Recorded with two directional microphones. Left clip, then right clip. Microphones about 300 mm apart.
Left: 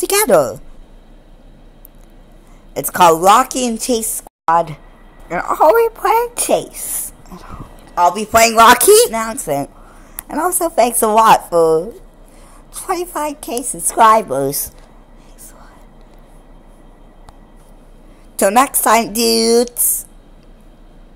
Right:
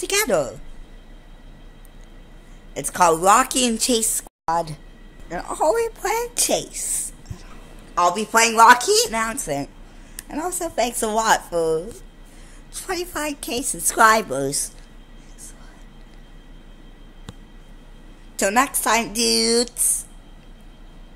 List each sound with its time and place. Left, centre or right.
0.0 s a woman's voice: centre
2.7 s speech: centre
9.1 s a woman's voice: centre
18.3 s speech: centre